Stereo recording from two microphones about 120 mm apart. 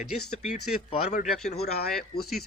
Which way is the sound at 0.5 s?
80° left.